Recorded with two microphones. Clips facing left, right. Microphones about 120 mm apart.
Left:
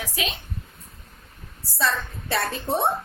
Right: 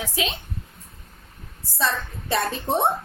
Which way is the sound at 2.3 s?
20° right (ahead or behind).